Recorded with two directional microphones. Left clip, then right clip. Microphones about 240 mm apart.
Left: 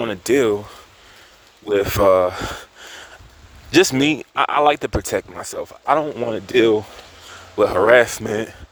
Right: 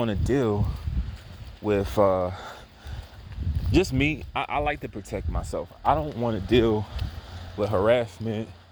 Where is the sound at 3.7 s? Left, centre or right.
Left.